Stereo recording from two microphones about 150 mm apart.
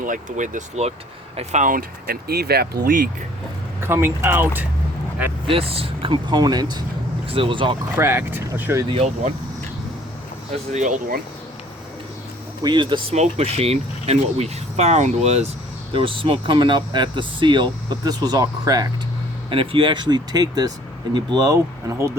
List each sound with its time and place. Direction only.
0.0 s speech: 60° right (ahead or behind); by 2.6 s 90° right
2.8 s speech: 65° right (ahead or behind)
3.8 s speech: 15° right (ahead or behind)
5.5 s speech: 40° right (ahead or behind)
7.9 s speech: 15° right (ahead or behind)
8.9 s speech: 40° right (ahead or behind)
10.7 s speech: 55° right (ahead or behind)
12.6 s speech: 30° right (ahead or behind)
13.1 s speech: 45° right (ahead or behind); by 18.9 s 25° right (ahead or behind)
19.5 s speech: 35° right (ahead or behind); by 22.1 s 20° right (ahead or behind)